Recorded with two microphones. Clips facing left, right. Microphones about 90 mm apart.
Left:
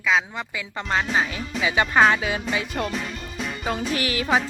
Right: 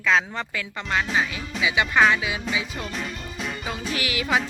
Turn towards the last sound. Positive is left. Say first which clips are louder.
# left 2 dB
turn(degrees=35)  # may be behind; listen again after turning